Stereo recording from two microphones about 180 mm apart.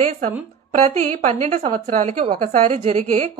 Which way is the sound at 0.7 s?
40° right (ahead or behind).